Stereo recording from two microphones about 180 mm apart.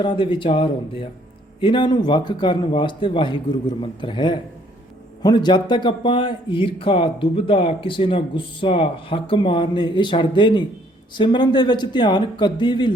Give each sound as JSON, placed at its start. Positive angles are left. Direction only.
{"t": 0.0, "sound": "speech", "side_deg": 30}